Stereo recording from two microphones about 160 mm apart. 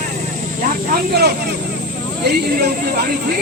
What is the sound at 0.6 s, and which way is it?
Vehicle, 65° right (ahead or behind).